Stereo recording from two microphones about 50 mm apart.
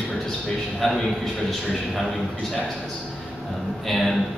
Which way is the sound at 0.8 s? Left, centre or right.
Centre.